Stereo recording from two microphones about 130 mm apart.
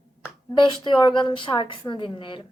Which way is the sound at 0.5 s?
40° left (ahead or behind).